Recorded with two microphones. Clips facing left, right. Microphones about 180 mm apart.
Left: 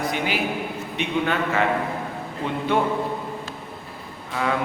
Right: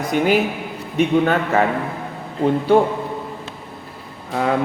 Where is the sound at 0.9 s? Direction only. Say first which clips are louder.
Right 8 dB; 45° right (ahead or behind).